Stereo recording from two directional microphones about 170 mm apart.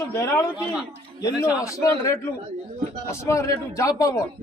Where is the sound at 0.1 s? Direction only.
15° left (ahead or behind).